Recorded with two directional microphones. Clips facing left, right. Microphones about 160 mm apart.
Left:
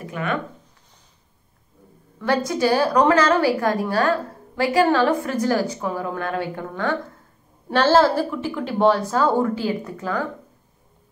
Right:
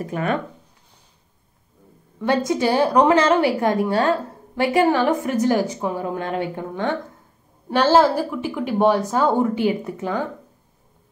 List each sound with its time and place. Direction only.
0.0 s speech: 40° right (ahead or behind)
2.1 s a woman's voice: 20° right (ahead or behind)